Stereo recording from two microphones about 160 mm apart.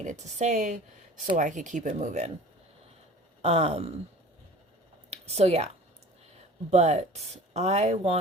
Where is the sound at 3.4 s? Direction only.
40° right (ahead or behind).